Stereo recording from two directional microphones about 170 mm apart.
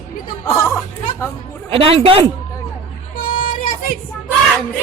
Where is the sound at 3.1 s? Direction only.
55° left (ahead or behind).